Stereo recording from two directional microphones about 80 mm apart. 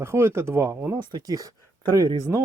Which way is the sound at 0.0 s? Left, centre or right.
Right.